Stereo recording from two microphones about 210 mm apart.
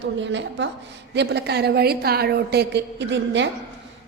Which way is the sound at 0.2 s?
60° right (ahead or behind).